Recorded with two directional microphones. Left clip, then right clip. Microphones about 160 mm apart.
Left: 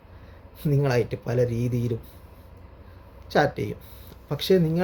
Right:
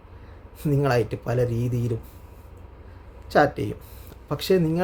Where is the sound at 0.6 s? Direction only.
15° right (ahead or behind).